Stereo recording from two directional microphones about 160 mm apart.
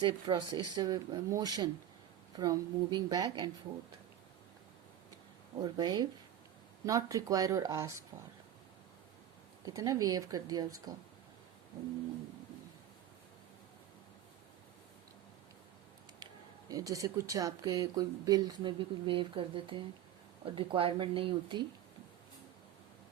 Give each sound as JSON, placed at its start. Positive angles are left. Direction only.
{"t": 0.0, "sound": "speech", "side_deg": -30}
{"t": 5.5, "sound": "speech", "side_deg": -25}
{"t": 9.6, "sound": "speech", "side_deg": -20}
{"t": 16.2, "sound": "speech", "side_deg": -25}